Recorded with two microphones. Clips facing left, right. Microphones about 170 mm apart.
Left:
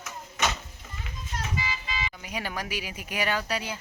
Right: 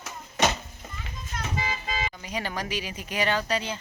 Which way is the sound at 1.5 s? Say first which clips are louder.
Right 5 dB; 50° right (ahead or behind).